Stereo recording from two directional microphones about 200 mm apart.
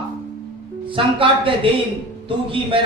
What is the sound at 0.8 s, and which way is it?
A man's voice, 25° right (ahead or behind).